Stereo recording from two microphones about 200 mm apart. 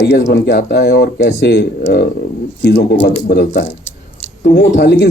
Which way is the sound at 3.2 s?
50° left (ahead or behind).